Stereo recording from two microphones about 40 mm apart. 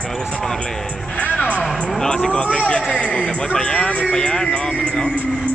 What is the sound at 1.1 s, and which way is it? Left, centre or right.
Speech, left.